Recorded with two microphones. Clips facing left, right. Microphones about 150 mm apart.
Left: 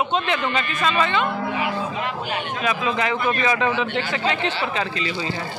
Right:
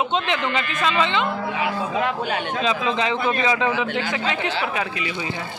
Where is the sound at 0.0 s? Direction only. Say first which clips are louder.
Even; 20° right (ahead or behind).